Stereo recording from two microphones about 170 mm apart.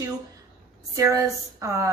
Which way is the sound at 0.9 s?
20° right (ahead or behind).